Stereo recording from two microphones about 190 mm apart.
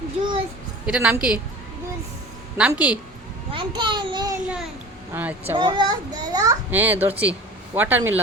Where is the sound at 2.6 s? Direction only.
5° right (ahead or behind).